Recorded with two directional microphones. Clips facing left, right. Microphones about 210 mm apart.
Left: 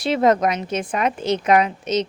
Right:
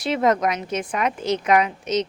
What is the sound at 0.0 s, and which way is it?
A woman's voice, 30° left (ahead or behind).